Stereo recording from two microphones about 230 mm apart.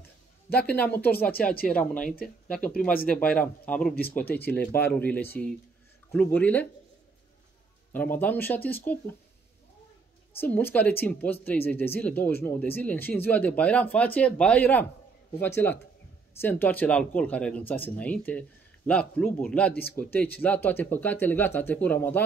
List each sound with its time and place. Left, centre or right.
0.6 s speech: centre
3.9 s speech: left
4.2 s speech: centre
7.9 s speech: centre
10.4 s speech: centre
19.7 s speech: left
20.0 s speech: centre